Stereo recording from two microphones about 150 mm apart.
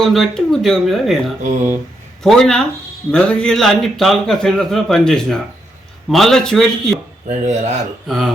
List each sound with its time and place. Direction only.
0.0 s speech: centre (ahead or behind)
2.2 s speech: 5° left (ahead or behind)
7.3 s speech: 50° right (ahead or behind)
8.0 s speech: centre (ahead or behind)